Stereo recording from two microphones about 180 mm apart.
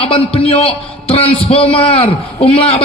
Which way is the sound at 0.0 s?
30° left (ahead or behind).